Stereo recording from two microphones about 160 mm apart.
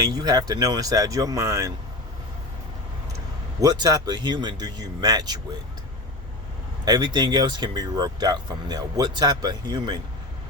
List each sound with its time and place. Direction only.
0.0 s speech: 25° right (ahead or behind)
3.6 s speech: 25° right (ahead or behind)
6.8 s speech: 25° right (ahead or behind)